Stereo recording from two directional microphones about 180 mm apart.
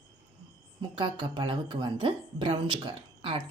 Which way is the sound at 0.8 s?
25° right (ahead or behind).